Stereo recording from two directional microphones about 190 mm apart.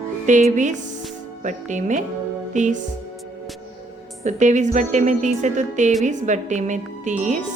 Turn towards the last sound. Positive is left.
turn(degrees=-40)  # may be behind; listen again after turning